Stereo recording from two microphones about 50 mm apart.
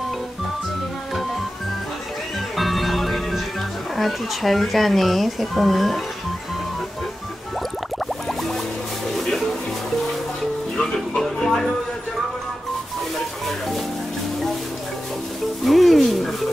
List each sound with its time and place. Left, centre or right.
2.5 s music: centre
3.9 s speech: centre
8.3 s music: centre
10.8 s music: centre
13.5 s music: centre
15.6 s a sound: centre